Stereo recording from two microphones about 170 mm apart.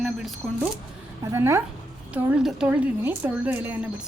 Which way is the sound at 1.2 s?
15° right (ahead or behind).